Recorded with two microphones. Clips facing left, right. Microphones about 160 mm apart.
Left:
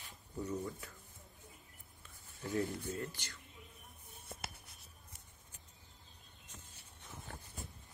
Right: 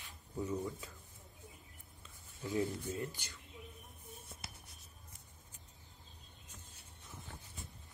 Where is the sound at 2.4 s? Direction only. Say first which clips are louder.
Right 1 dB; 20° right (ahead or behind).